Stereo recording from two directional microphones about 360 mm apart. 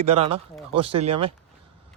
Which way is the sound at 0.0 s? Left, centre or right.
Centre.